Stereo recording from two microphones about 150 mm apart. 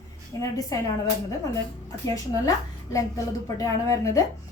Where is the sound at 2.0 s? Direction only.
20° left (ahead or behind).